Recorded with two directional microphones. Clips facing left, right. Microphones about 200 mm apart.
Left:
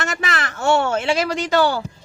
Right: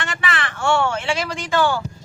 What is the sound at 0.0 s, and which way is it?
Speech, 40° left (ahead or behind).